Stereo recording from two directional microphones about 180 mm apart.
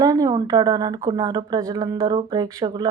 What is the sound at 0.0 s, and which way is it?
Speech, 20° right (ahead or behind).